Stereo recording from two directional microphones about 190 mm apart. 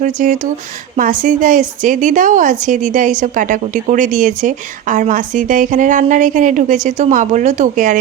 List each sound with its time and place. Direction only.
0.0 s a woman's voice: 40° right (ahead or behind)